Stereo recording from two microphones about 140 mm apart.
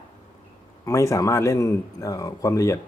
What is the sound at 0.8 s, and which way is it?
A man's voice, 20° left (ahead or behind).